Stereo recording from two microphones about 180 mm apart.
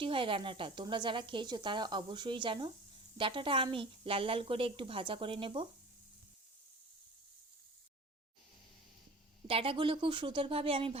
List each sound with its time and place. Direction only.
0.0 s speech: 30° right (ahead or behind)
9.5 s speech: 30° right (ahead or behind)